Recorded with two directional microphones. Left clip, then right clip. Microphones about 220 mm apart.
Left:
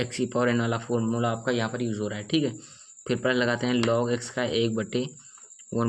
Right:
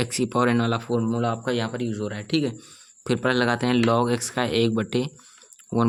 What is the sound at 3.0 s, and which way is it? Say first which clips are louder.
Speech: right 3 dB; 30° right (ahead or behind).